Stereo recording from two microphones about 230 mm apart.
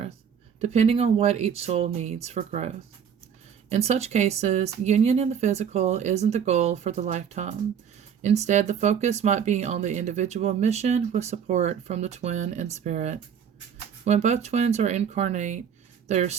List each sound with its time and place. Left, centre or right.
0.6 s speech: right